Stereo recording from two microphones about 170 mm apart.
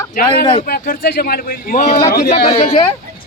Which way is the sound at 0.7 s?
65° left (ahead or behind).